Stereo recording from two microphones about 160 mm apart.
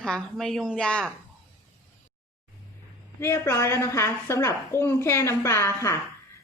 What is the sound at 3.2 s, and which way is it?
A woman's voice, 15° left (ahead or behind).